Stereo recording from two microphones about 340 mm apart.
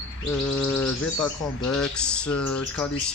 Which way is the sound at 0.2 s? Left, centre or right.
Centre.